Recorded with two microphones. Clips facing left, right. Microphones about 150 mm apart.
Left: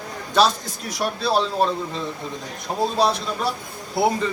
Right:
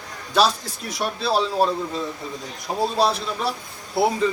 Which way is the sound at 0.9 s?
Centre (ahead or behind).